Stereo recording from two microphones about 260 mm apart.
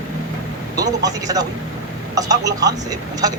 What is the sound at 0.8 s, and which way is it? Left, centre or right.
Speech, centre.